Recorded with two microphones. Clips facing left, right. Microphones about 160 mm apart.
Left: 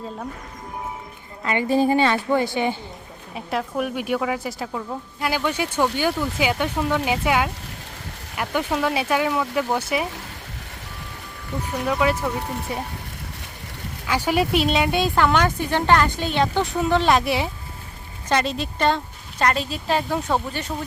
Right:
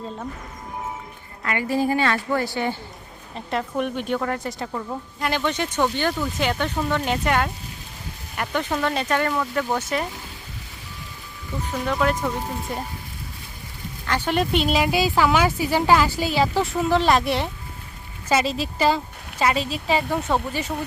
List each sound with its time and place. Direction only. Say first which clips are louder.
1.5 s a woman's voice: left 3 dB; 25° left (ahead or behind)
3.3 s speech: even; 5° left (ahead or behind)
11.9 s speech: left 1 dB; centre (ahead or behind)
14.1 s speech: left 1 dB; 10° left (ahead or behind)